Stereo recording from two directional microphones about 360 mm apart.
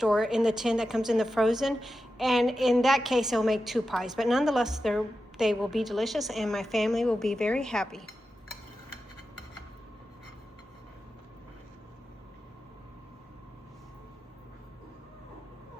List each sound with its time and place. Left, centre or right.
0.0 s a woman's voice: centre